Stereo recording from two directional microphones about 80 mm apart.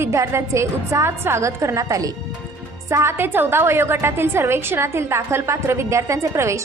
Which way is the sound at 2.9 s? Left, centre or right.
Right.